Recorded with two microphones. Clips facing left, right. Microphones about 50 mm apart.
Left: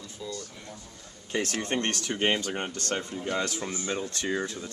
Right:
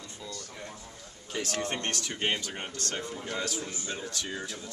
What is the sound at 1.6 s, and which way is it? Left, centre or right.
Speech, left.